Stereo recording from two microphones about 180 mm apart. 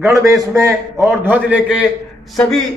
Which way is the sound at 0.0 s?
20° right (ahead or behind).